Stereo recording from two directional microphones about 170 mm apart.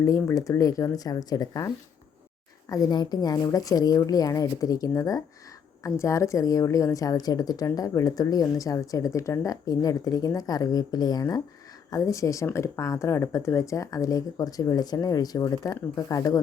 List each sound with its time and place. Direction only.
0.0 s a woman's voice: 15° left (ahead or behind)